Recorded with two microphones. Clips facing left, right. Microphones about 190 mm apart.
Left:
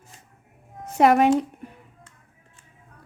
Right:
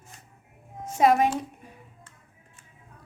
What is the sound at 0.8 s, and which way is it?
Speech, 65° left (ahead or behind).